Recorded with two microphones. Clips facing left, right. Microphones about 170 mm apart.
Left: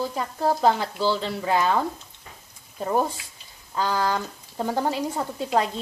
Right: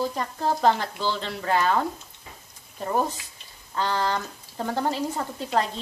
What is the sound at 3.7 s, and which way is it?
Speech, 10° left (ahead or behind).